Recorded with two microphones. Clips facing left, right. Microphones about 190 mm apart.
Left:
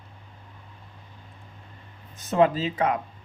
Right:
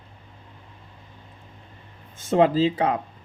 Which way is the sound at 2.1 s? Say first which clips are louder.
Right 2 dB; 30° right (ahead or behind).